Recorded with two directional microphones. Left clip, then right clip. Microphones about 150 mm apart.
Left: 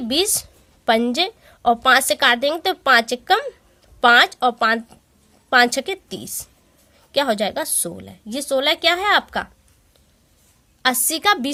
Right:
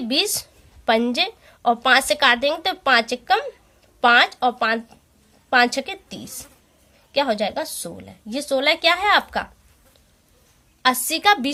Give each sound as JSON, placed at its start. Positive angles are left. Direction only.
{"t": 0.1, "sound": "a woman's voice", "side_deg": 45}
{"t": 10.8, "sound": "a woman's voice", "side_deg": 45}